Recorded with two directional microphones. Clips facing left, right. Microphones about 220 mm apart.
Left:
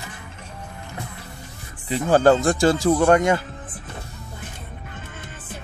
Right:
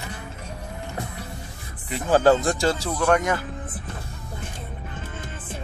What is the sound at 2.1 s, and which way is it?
Speech, 50° left (ahead or behind).